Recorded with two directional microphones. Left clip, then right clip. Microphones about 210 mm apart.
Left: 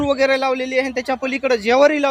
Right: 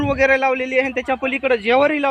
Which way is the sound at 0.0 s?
35° left (ahead or behind).